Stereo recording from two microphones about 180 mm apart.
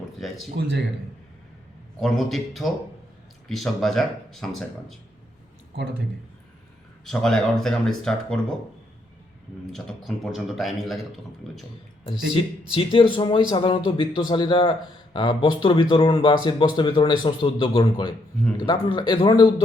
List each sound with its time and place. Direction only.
0.2 s speech: centre (ahead or behind)
2.0 s speech: centre (ahead or behind)
7.0 s speech: 5° left (ahead or behind)
9.7 s speech: centre (ahead or behind)
12.3 s speech: 30° left (ahead or behind)